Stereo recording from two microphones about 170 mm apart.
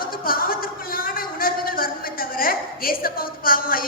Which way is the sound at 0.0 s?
60° left (ahead or behind).